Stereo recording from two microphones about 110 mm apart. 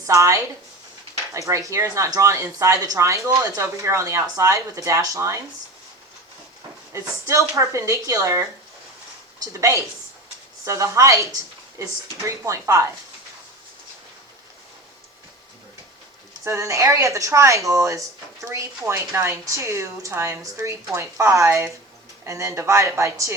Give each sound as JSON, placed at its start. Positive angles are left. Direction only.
{"t": 0.1, "sound": "speech", "side_deg": -30}
{"t": 6.9, "sound": "speech", "side_deg": -30}
{"t": 16.4, "sound": "speech", "side_deg": -25}